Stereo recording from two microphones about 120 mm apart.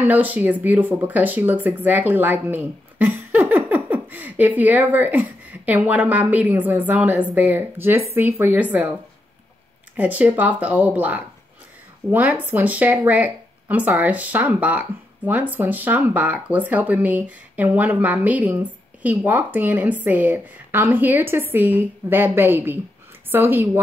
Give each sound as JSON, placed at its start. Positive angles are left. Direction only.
{"t": 0.0, "sound": "speech", "side_deg": -15}
{"t": 9.9, "sound": "a woman's voice", "side_deg": -15}